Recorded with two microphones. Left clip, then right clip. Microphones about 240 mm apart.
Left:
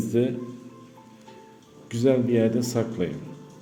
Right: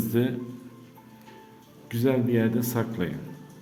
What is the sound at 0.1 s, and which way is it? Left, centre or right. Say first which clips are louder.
Speech: left 3 dB; centre.